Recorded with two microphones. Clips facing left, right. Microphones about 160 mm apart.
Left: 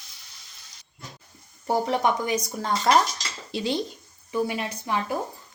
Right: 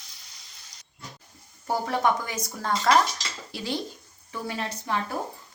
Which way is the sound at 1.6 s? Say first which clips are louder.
Left 2 dB; 15° left (ahead or behind).